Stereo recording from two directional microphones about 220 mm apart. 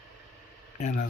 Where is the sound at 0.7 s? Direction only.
30° left (ahead or behind).